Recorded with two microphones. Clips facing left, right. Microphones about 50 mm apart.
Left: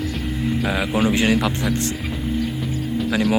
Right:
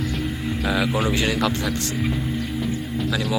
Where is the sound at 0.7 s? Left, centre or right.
Centre.